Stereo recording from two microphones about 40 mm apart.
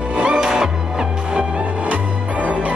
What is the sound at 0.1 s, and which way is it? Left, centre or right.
Music, right.